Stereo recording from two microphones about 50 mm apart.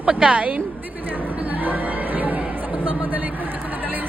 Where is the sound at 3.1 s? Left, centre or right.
Right.